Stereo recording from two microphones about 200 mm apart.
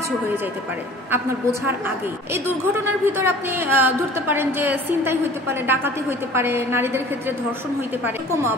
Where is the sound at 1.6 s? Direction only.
10° right (ahead or behind).